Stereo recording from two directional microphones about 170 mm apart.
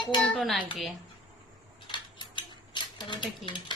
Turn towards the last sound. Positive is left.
turn(degrees=30)  # may be behind; listen again after turning